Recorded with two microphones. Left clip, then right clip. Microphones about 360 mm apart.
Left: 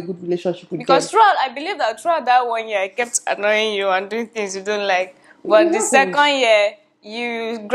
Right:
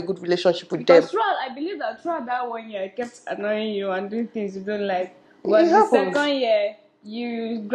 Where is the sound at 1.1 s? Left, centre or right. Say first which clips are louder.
Left 9 dB; left.